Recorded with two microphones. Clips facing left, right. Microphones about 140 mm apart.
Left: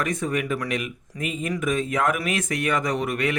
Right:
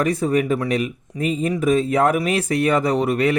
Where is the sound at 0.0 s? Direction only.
35° right (ahead or behind).